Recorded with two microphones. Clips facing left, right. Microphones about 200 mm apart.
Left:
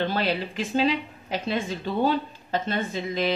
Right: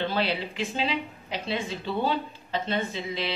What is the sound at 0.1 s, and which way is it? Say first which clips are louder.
Speech: left 2 dB; 45° left (ahead or behind).